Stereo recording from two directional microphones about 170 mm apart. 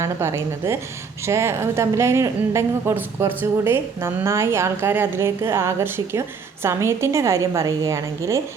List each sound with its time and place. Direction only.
0.0 s a woman's voice: 15° right (ahead or behind)